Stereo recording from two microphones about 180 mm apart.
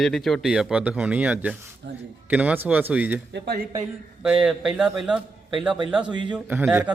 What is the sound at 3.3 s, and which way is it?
Speech, 65° right (ahead or behind).